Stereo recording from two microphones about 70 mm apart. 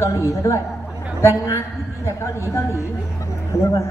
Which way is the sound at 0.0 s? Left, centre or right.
Left.